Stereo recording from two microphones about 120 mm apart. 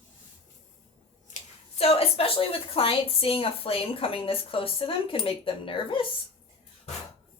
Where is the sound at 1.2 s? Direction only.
75° left (ahead or behind); by 6.0 s 45° left (ahead or behind).